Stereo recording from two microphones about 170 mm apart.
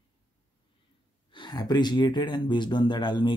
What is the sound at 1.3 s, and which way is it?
Speech, 25° left (ahead or behind).